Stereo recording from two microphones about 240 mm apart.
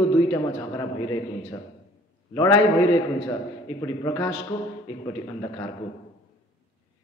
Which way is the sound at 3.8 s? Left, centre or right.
Centre.